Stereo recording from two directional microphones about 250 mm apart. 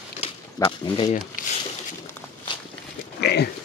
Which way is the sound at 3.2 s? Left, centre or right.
Left.